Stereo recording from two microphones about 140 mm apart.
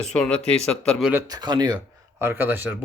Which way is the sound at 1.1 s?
25° right (ahead or behind).